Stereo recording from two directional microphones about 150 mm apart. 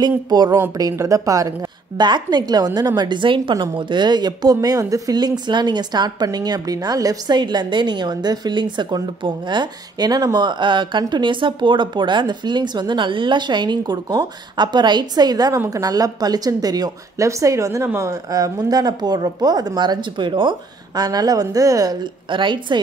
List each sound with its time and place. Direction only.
0.0 s a woman's voice: 30° right (ahead or behind)
22.3 s a woman's voice: 35° right (ahead or behind)